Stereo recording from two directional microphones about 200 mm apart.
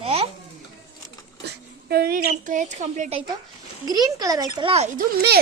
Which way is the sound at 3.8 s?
20° right (ahead or behind).